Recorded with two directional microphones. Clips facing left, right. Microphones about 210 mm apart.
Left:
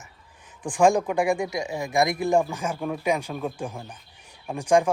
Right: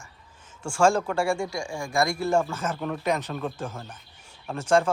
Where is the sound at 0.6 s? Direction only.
15° left (ahead or behind).